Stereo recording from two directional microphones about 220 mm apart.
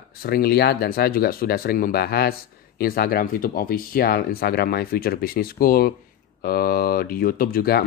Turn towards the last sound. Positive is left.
turn(degrees=45)  # may be behind; listen again after turning